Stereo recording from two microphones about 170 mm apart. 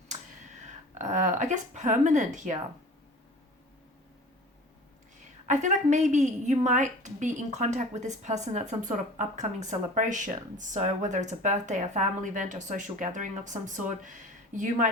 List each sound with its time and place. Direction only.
0.9 s a woman's voice: 45° right (ahead or behind)
5.5 s a woman's voice: 45° right (ahead or behind)